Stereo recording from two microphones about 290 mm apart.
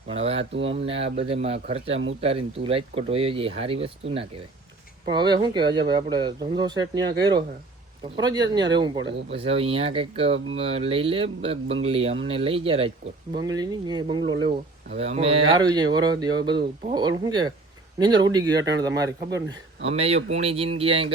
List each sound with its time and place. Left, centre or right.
0.1 s speech: right